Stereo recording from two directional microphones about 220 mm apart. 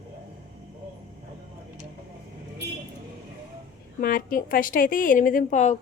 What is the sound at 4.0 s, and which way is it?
A woman's voice, 40° left (ahead or behind).